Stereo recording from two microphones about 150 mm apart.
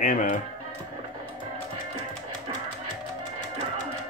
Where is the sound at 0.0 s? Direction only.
60° left (ahead or behind).